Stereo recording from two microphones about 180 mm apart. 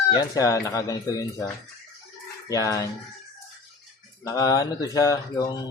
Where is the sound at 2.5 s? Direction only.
20° left (ahead or behind).